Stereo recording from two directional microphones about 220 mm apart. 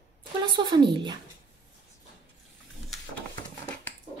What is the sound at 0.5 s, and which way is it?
Speech, 20° right (ahead or behind).